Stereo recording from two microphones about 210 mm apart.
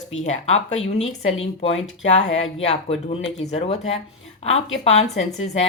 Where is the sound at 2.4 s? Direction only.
30° left (ahead or behind).